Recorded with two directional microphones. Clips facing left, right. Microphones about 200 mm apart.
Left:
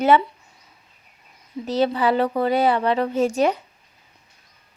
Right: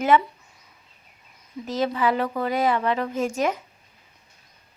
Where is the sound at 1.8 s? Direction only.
30° left (ahead or behind).